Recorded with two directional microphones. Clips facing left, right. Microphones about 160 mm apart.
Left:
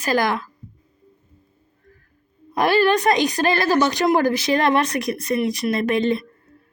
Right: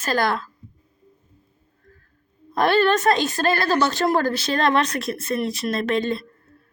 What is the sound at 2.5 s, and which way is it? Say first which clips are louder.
Speech: left 1 dB; 10° left (ahead or behind).